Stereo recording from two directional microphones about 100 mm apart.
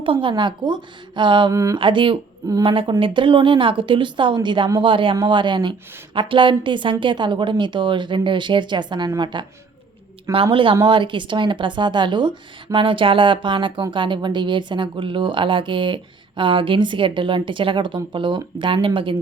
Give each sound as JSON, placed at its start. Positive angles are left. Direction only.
{"t": 0.0, "sound": "a woman's voice", "side_deg": -60}
{"t": 10.3, "sound": "a woman's voice", "side_deg": -60}